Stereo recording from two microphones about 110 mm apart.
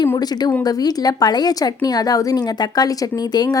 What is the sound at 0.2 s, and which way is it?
A woman's voice, 40° left (ahead or behind).